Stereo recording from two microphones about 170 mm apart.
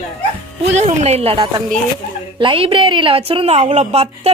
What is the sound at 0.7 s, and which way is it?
A woman's voice, 40° right (ahead or behind).